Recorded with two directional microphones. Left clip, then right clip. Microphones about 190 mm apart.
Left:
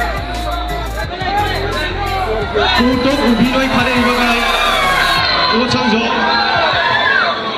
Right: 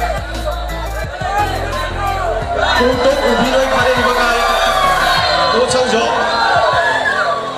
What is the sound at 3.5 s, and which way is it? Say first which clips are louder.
Music: right 2 dB; 55° right (ahead or behind).